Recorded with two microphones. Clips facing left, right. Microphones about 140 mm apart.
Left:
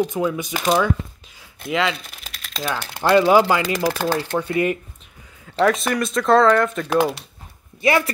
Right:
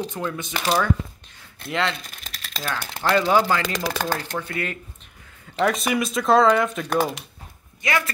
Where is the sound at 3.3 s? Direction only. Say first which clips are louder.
Left 4 dB; 10° left (ahead or behind).